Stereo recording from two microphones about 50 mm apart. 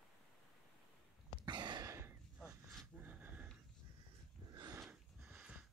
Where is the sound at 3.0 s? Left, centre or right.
Right.